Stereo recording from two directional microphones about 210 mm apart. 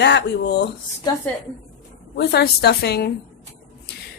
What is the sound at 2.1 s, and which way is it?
Speech, 50° left (ahead or behind).